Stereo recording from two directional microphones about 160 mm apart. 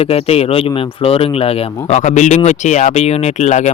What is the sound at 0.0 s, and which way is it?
Speech, 40° left (ahead or behind).